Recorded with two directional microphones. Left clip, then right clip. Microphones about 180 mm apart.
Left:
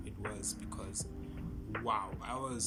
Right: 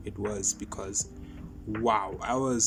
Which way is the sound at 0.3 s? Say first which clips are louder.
Right 11 dB; 45° right (ahead or behind).